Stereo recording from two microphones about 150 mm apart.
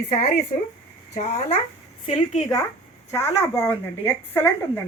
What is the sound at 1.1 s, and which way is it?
Speech, 50° left (ahead or behind).